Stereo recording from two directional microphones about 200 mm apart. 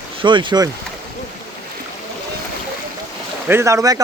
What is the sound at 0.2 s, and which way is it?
Speech, 25° right (ahead or behind).